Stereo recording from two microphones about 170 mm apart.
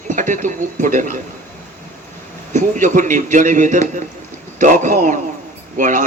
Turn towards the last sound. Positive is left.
turn(degrees=-50)  # may be behind; listen again after turning